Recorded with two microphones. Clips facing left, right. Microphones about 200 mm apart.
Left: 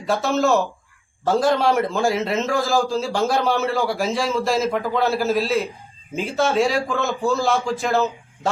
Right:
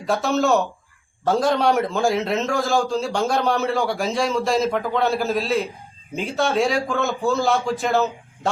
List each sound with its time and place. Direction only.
0.0 s a man's voice: centre (ahead or behind)